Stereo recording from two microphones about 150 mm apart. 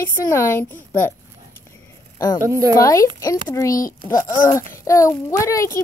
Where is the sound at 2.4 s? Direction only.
20° right (ahead or behind).